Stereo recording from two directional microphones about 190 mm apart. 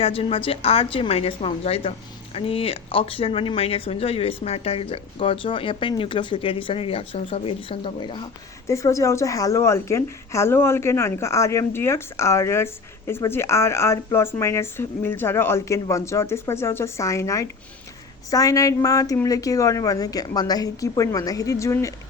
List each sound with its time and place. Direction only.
0.0 s a woman's voice: 30° left (ahead or behind)